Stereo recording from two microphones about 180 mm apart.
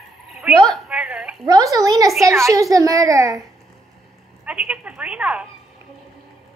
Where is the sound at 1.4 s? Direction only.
20° right (ahead or behind).